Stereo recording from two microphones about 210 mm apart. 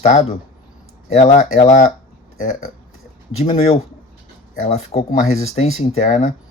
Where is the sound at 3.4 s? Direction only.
30° left (ahead or behind).